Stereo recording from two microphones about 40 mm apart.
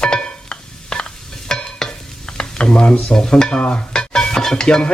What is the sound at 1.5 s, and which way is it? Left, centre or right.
Stir, centre.